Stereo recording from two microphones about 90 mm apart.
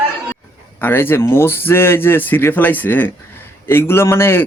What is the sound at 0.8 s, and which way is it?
Speech, 25° left (ahead or behind).